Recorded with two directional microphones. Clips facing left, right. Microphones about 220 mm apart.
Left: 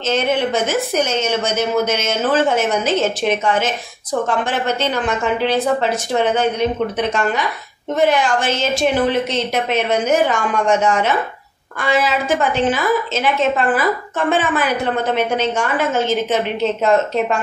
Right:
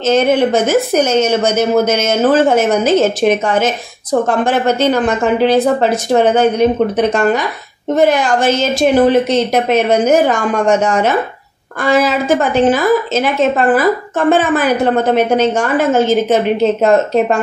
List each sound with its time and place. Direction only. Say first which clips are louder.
0.0 s a woman's voice: right 7 dB; 40° right (ahead or behind)